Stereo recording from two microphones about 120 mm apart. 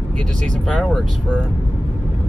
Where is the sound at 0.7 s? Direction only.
5° left (ahead or behind).